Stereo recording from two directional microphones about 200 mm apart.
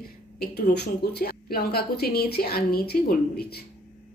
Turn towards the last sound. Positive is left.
turn(degrees=50)  # may be behind; listen again after turning